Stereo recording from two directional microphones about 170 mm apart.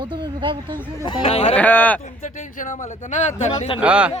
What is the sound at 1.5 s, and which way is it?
Speech, 10° left (ahead or behind).